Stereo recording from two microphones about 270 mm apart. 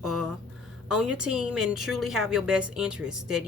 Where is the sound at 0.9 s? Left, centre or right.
Centre.